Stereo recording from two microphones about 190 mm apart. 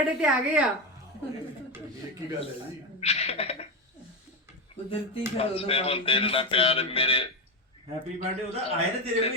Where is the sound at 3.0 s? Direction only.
35° left (ahead or behind).